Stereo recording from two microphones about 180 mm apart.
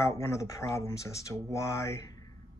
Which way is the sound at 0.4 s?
15° left (ahead or behind).